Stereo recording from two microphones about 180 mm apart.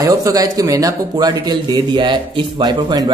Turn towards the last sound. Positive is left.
turn(degrees=-20)  # may be behind; listen again after turning